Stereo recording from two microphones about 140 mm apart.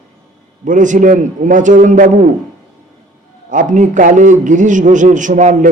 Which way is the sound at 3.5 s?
65° right (ahead or behind).